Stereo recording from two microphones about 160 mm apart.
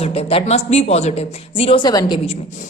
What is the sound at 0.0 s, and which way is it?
A woman's voice, 40° left (ahead or behind).